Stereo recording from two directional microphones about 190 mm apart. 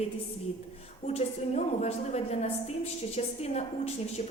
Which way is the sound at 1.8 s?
35° left (ahead or behind).